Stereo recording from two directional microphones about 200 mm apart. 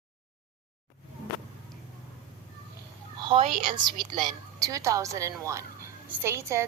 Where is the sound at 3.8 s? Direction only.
20° right (ahead or behind).